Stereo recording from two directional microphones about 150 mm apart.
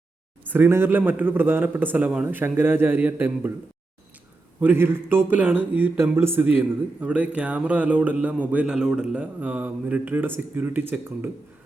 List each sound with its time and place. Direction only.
0.5 s speech: 15° right (ahead or behind)
4.6 s speech: 15° right (ahead or behind)